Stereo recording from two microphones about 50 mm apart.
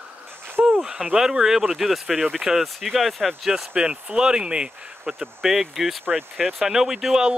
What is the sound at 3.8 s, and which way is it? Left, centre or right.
Speech, centre.